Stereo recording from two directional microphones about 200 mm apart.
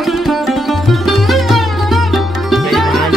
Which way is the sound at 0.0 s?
Centre (ahead or behind).